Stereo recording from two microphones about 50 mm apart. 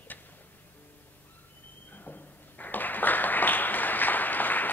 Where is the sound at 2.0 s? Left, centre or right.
Left.